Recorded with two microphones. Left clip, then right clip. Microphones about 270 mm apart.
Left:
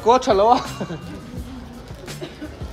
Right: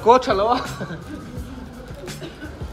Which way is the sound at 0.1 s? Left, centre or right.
Left.